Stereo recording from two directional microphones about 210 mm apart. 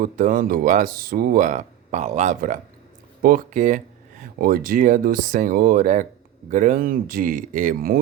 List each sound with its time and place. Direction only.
0.0 s speech: 40° right (ahead or behind)